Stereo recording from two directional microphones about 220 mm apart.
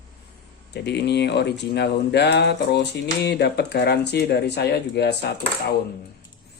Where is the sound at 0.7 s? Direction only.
50° left (ahead or behind).